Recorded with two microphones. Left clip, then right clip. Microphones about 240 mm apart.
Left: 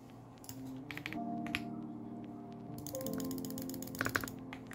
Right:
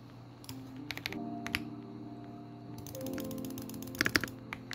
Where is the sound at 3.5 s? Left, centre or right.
Centre.